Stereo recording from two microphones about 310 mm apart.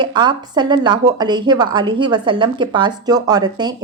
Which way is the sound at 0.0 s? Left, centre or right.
Centre.